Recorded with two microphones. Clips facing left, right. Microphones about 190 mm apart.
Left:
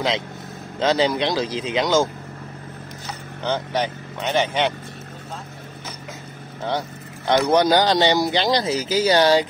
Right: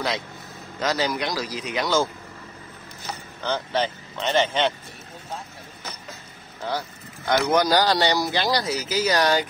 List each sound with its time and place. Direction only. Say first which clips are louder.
0.7 s speech: left 5 dB; 25° left (ahead or behind)
3.4 s speech: left 2 dB; 15° left (ahead or behind)
7.2 s speech: left 3 dB; 25° left (ahead or behind)